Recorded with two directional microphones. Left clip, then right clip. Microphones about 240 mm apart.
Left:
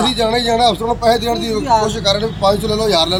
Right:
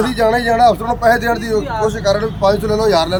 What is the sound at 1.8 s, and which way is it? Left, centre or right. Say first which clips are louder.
Speech: right 1 dB; centre.